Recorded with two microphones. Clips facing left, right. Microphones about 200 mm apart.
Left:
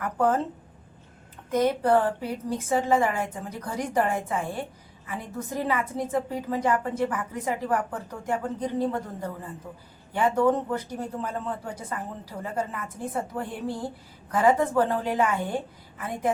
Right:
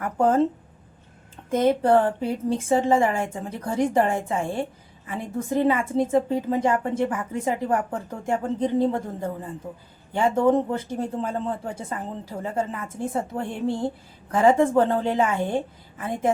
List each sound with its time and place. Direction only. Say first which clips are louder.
0.0 s speech: right 4 dB; 25° right (ahead or behind)
1.5 s speech: right 3 dB; 25° right (ahead or behind)